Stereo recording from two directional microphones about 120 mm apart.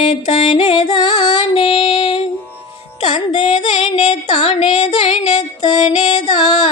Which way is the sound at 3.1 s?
90° left.